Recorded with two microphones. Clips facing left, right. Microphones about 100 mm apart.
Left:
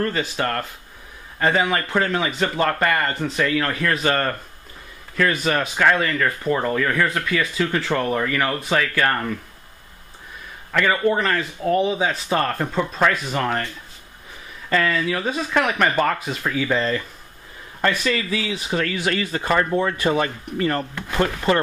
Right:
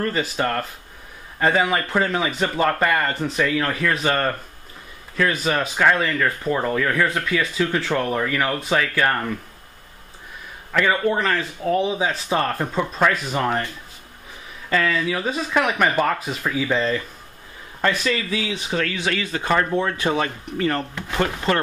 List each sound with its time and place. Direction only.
0.1 s speech: 5° right (ahead or behind)
10.7 s speech: 5° right (ahead or behind)
14.7 s speech: centre (ahead or behind)
18.1 s speech: 20° right (ahead or behind)
18.5 s speech: 5° left (ahead or behind)
20.0 s speech: 10° right (ahead or behind)